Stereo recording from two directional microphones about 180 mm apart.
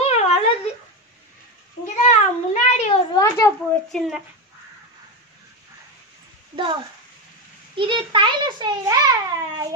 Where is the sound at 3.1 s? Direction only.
20° left (ahead or behind).